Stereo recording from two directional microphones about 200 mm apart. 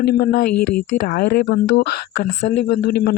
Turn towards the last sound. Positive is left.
turn(degrees=50)  # may be behind; listen again after turning